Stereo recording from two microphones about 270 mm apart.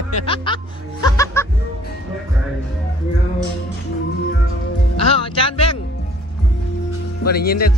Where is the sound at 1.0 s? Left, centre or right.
Centre.